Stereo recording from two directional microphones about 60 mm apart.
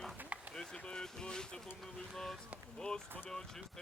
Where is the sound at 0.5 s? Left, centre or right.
Centre.